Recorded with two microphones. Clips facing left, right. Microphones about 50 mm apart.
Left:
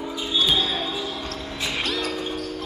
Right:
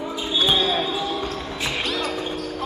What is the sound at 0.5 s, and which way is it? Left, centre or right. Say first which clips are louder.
Basketball bounce: right 3 dB; centre.